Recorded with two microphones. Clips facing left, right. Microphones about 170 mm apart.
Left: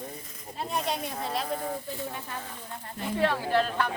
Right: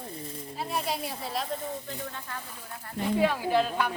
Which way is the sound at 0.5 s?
5° right (ahead or behind).